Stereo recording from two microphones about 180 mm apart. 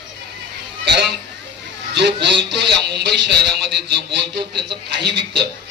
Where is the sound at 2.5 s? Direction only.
70° right (ahead or behind).